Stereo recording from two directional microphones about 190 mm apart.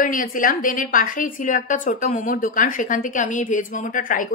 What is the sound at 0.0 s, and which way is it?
A woman's voice, 45° left (ahead or behind).